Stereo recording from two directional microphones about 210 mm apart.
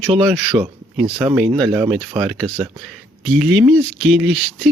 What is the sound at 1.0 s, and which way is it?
Speech, 10° right (ahead or behind).